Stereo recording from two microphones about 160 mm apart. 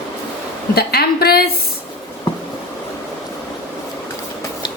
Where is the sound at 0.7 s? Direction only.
80° left.